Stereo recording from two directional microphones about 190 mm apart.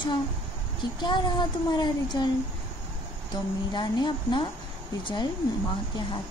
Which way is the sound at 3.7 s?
25° left (ahead or behind).